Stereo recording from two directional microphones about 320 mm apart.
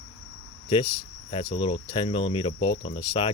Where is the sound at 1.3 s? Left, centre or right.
Centre.